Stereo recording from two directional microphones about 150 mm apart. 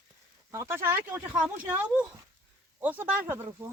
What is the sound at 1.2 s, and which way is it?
Speech, 5° right (ahead or behind).